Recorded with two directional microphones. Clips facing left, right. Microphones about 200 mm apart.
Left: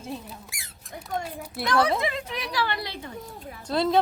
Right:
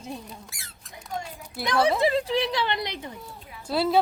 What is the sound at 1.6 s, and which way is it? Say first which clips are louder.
A woman's voice: right 2 dB; 25° right (ahead or behind).